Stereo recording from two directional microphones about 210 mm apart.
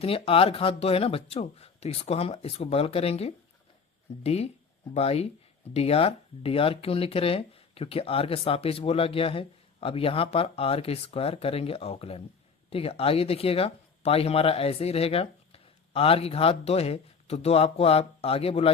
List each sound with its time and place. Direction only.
0.0 s speech: 25° left (ahead or behind)